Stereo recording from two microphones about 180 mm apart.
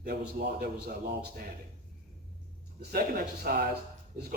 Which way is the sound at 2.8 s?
55° right (ahead or behind).